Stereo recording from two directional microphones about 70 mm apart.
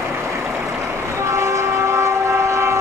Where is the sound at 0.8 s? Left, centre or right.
Right.